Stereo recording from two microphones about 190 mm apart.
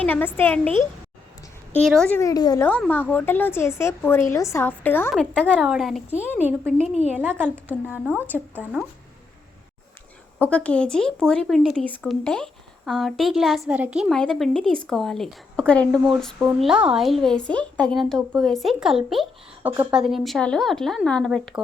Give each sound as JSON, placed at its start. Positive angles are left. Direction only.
{"t": 0.0, "sound": "a woman's voice", "side_deg": 10}
{"t": 1.7, "sound": "a woman's voice", "side_deg": 5}
{"t": 2.6, "sound": "a woman's voice", "side_deg": 5}
{"t": 6.1, "sound": "a woman's voice", "side_deg": 10}
{"t": 6.8, "sound": "a woman's voice", "side_deg": 35}
{"t": 7.2, "sound": "a woman's voice", "side_deg": -10}
{"t": 10.4, "sound": "speech", "side_deg": 5}